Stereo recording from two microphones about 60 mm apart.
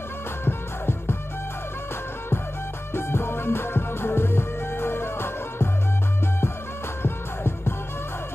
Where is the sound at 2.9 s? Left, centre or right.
Left.